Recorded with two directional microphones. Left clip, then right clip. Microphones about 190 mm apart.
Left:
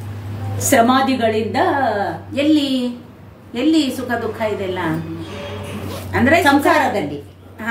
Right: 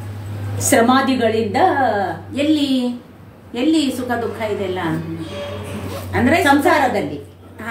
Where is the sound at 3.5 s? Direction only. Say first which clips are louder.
Left 1 dB; 20° left (ahead or behind).